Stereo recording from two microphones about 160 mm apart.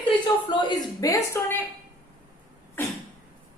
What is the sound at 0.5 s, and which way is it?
Speech, 25° left (ahead or behind).